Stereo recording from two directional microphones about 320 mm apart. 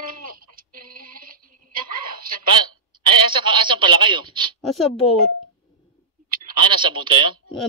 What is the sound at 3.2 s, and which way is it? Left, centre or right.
A man's voice, centre.